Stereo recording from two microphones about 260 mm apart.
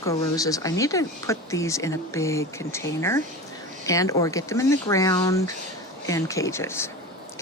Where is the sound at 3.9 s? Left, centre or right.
Centre.